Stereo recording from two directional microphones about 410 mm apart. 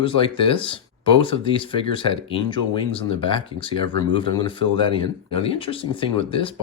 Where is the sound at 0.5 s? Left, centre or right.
Centre.